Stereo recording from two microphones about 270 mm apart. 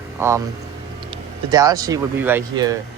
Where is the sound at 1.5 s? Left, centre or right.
Centre.